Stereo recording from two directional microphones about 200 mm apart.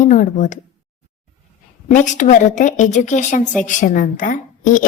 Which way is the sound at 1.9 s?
40° left (ahead or behind).